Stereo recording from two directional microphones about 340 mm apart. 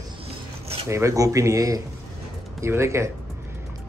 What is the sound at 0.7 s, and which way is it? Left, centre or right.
Speech, centre.